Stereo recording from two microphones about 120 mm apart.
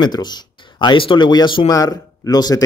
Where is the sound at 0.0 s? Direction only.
35° left (ahead or behind).